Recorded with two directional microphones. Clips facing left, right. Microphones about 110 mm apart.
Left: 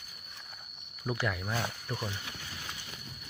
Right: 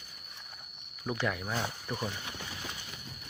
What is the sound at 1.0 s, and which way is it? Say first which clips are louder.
Speech: even; centre (ahead or behind).